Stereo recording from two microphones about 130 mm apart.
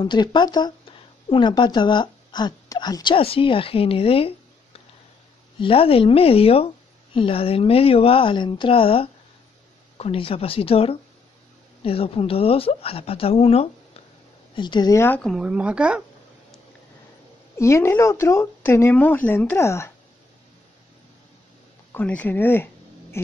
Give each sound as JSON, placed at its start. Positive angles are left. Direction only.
{"t": 0.0, "sound": "a woman's voice", "side_deg": 35}
{"t": 5.6, "sound": "speech", "side_deg": 45}
{"t": 14.5, "sound": "a woman's voice", "side_deg": 35}
{"t": 15.0, "sound": "speech", "side_deg": 15}
{"t": 15.2, "sound": "speech", "side_deg": -5}
{"t": 17.6, "sound": "speech", "side_deg": 20}
{"t": 21.9, "sound": "speech", "side_deg": 10}